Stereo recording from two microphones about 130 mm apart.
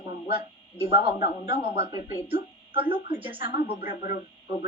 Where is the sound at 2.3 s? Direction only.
45° right (ahead or behind).